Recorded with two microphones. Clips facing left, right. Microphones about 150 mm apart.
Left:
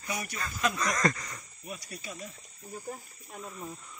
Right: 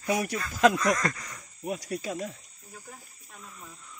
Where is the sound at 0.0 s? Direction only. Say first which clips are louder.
Right 9 dB; 85° right.